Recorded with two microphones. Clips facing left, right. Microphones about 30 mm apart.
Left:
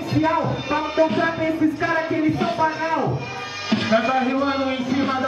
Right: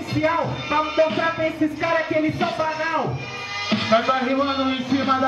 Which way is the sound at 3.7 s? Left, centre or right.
Right.